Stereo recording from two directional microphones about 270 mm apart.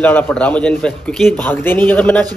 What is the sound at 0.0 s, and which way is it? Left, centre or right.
A man's voice, centre.